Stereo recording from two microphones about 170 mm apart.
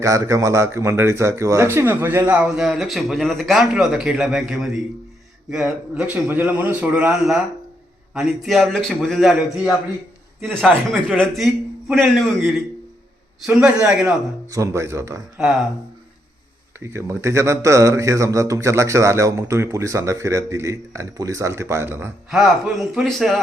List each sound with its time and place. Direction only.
0.0 s speech: 20° right (ahead or behind)
14.5 s speech: 15° right (ahead or behind)
16.8 s speech: 15° right (ahead or behind)
22.3 s speech: centre (ahead or behind)